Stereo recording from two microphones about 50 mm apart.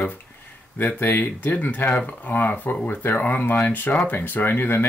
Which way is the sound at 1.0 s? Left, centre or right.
Left.